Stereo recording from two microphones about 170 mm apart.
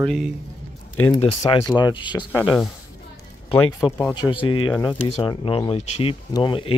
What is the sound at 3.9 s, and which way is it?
Speech, 10° left (ahead or behind).